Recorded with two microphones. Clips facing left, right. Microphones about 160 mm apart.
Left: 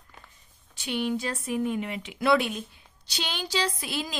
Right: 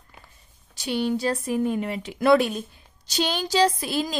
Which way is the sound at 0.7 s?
35° right (ahead or behind).